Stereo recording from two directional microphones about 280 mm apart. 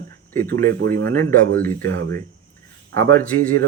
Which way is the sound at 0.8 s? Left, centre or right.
Right.